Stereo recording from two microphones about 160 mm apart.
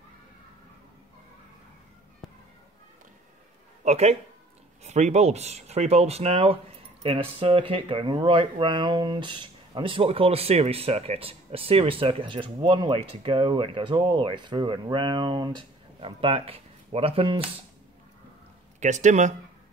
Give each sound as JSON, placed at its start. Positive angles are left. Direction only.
{"t": 3.8, "sound": "speech", "side_deg": -40}
{"t": 18.8, "sound": "speech", "side_deg": -50}